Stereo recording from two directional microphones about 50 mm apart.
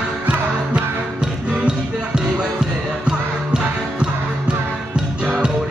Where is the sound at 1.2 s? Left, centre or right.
Centre.